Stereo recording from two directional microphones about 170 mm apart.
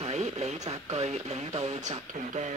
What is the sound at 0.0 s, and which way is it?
Speech, 40° right (ahead or behind).